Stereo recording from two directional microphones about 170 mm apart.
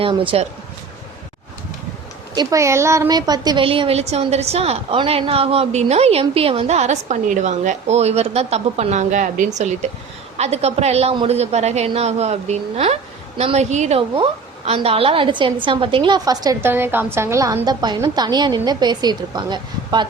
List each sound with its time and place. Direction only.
0.0 s a woman's voice: 30° right (ahead or behind)
2.3 s a woman's voice: 20° right (ahead or behind)